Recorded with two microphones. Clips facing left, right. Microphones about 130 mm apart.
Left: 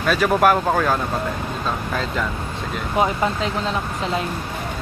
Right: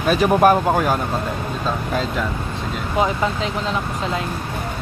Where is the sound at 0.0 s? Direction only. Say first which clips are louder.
Right 2 dB; 20° right (ahead or behind).